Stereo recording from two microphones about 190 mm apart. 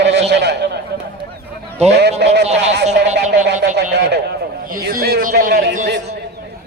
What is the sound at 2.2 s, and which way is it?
Speech, 65° right (ahead or behind).